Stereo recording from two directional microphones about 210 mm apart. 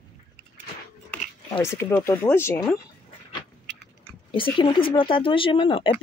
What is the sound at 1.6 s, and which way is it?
Speech, 15° left (ahead or behind).